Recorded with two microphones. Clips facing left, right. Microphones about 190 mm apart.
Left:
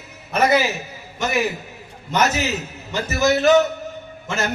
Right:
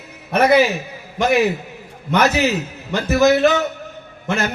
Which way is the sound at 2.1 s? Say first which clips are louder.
Right 4 dB; 60° right (ahead or behind).